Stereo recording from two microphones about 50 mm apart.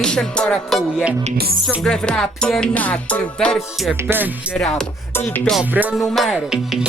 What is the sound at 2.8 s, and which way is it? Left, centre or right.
Music, left.